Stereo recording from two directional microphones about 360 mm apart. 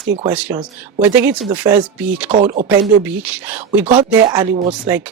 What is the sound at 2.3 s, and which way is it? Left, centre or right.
Speech, centre.